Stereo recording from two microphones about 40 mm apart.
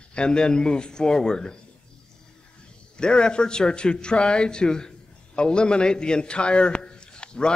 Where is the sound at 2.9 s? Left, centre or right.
Left.